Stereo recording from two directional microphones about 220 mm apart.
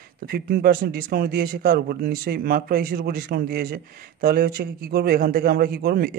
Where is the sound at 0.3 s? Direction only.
40° right (ahead or behind).